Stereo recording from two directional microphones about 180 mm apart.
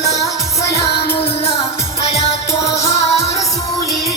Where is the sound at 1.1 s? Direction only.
35° left (ahead or behind).